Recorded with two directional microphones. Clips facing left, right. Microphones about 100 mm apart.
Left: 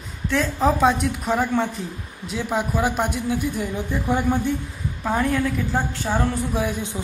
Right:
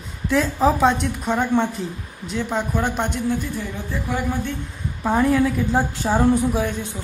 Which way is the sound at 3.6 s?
15° left (ahead or behind).